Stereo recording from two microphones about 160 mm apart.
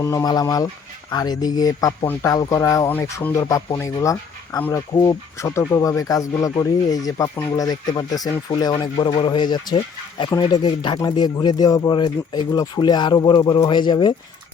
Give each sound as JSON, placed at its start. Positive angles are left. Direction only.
{"t": 0.0, "sound": "speech", "side_deg": 20}